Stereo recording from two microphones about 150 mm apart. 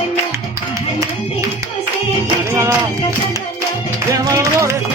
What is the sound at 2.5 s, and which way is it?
Music, 20° right (ahead or behind).